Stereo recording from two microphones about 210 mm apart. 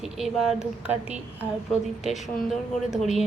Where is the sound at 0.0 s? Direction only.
Centre (ahead or behind).